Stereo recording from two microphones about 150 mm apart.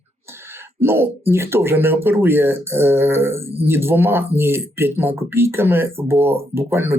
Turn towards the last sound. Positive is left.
turn(degrees=-15)  # may be behind; listen again after turning